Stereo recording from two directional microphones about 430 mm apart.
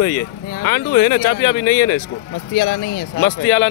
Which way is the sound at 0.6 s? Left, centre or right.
Left.